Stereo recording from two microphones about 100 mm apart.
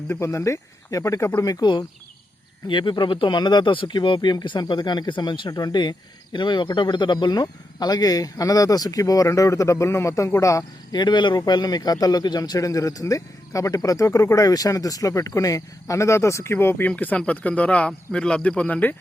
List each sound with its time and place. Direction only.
0.1 s speech: 30° left (ahead or behind)
2.6 s speech: 50° left (ahead or behind); by 10.6 s 30° left (ahead or behind)
10.9 s speech: 50° left (ahead or behind); by 18.9 s 15° left (ahead or behind)